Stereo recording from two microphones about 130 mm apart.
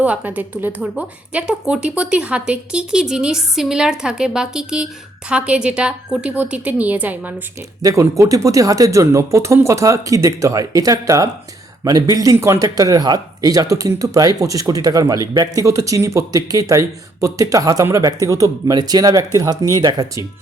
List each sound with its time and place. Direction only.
0.0 s a woman's voice: 15° right (ahead or behind)
7.8 s speech: 25° right (ahead or behind)